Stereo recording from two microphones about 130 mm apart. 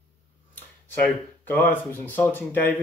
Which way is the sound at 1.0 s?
15° left (ahead or behind).